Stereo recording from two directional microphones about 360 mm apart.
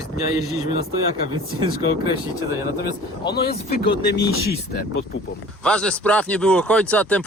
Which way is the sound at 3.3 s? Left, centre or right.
Left.